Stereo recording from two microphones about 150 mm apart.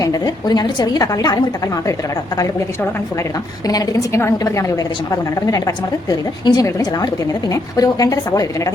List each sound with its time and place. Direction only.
0.0 s a woman's voice: 25° left (ahead or behind)
3.7 s a woman's voice: 25° left (ahead or behind)